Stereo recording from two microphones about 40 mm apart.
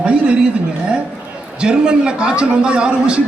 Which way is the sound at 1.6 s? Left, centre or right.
Right.